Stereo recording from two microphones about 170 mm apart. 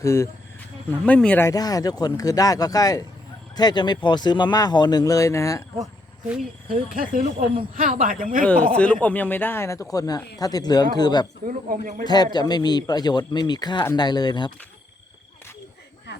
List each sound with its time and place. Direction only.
0.0 s speech: 15° left (ahead or behind)
6.7 s speech: 55° right (ahead or behind)
8.7 s speech: 10° left (ahead or behind); by 11.3 s 25° left (ahead or behind)
11.4 s a man's voice: 50° right (ahead or behind)
12.0 s speech: 25° left (ahead or behind)